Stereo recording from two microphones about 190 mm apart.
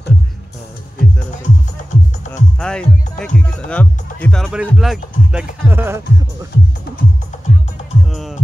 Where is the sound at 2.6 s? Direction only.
5° left (ahead or behind); by 6.5 s 15° right (ahead or behind).